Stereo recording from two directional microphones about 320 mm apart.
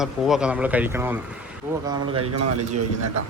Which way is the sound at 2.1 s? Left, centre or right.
Right.